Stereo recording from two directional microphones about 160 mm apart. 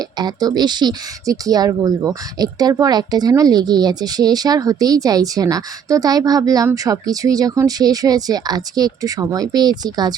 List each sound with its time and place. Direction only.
0.2 s speech: 25° right (ahead or behind)